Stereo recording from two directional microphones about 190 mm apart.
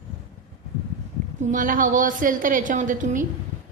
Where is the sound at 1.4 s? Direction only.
45° right (ahead or behind).